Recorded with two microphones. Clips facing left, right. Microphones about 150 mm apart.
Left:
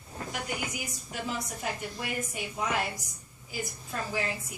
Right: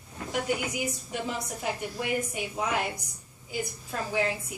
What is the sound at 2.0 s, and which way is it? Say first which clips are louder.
Speech: right 6 dB; 15° right (ahead or behind).